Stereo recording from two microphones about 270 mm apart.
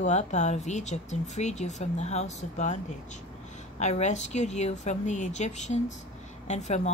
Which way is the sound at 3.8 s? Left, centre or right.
Left.